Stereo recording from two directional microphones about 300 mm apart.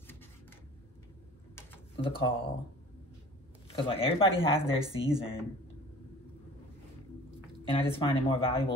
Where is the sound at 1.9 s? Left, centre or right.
Centre.